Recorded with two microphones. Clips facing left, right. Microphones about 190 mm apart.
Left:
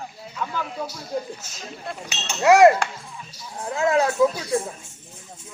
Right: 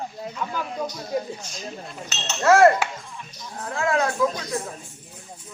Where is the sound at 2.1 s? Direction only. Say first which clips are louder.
Left 2 dB; 15° left (ahead or behind); by 4.7 s 30° left (ahead or behind).